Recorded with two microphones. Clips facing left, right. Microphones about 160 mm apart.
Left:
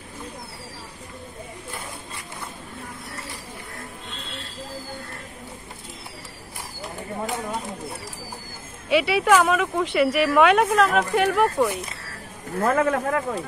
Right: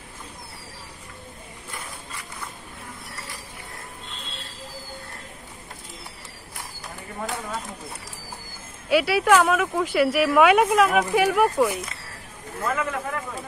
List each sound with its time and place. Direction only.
6.8 s bird: 20° left (ahead or behind)
8.8 s speech: centre (ahead or behind)
12.5 s speech: 50° left (ahead or behind)